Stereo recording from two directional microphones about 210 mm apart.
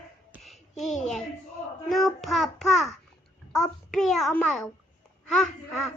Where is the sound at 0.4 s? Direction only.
Centre (ahead or behind).